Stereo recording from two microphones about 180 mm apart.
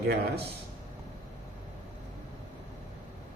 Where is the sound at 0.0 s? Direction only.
65° right (ahead or behind).